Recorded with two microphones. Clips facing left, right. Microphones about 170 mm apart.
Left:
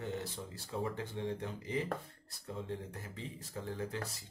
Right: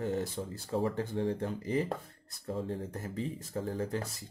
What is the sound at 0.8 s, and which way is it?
Speech, 30° right (ahead or behind).